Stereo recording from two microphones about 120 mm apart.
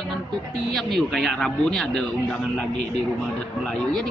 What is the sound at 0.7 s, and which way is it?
Speech, 5° left (ahead or behind).